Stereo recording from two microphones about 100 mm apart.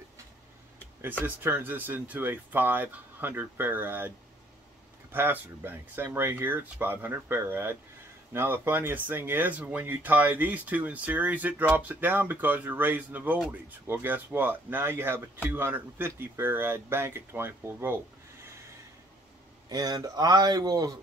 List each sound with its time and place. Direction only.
1.2 s speech: 20° right (ahead or behind)
5.1 s speech: 20° right (ahead or behind)
19.7 s speech: 40° right (ahead or behind)